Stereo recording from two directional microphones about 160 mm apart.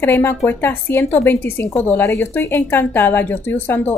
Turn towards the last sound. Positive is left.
turn(degrees=10)  # may be behind; listen again after turning